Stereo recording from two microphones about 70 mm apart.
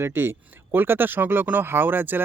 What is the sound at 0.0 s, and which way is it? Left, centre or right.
Speech, right.